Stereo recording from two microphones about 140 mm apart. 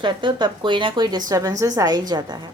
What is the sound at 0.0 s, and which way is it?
A woman's voice, 35° right (ahead or behind).